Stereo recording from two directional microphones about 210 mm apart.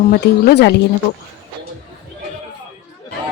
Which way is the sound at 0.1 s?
50° left (ahead or behind).